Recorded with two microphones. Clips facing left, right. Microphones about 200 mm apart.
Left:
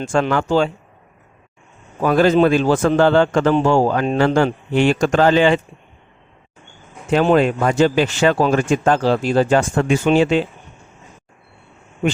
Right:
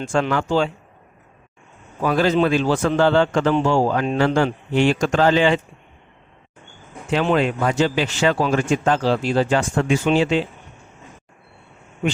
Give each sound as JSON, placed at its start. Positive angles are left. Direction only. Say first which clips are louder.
{"t": 0.0, "sound": "a man's voice", "louder": "left 3 dB", "side_deg": 50}
{"t": 2.0, "sound": "a man's voice", "louder": "left 4 dB", "side_deg": 50}
{"t": 7.1, "sound": "a man's voice", "louder": "left 4 dB", "side_deg": 45}